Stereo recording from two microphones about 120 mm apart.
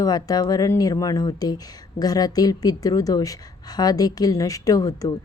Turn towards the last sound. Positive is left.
turn(degrees=30)  # may be behind; listen again after turning